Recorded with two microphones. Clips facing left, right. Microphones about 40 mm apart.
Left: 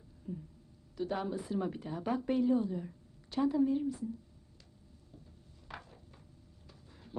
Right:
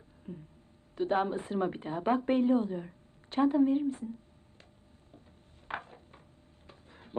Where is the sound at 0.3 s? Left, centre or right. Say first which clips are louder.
Left 2 dB; right.